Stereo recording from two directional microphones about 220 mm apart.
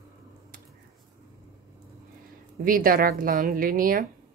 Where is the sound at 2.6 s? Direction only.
40° right (ahead or behind).